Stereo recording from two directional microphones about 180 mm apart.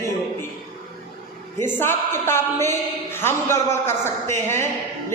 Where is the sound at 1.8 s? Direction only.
15° left (ahead or behind).